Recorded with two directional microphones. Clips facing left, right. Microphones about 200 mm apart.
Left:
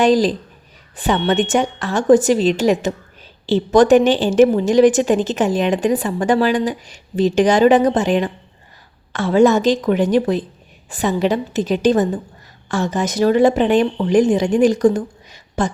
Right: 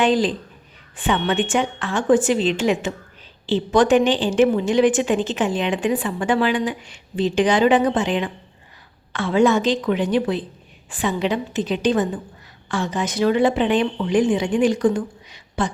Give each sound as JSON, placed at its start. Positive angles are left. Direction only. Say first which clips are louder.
{"t": 0.0, "sound": "a woman's voice", "louder": "left 4 dB", "side_deg": 40}